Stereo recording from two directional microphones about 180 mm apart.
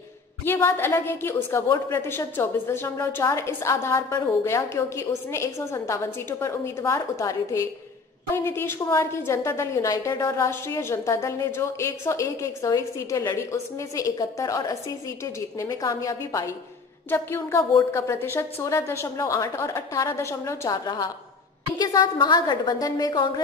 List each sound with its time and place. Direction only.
0.5 s a woman's voice: 10° left (ahead or behind)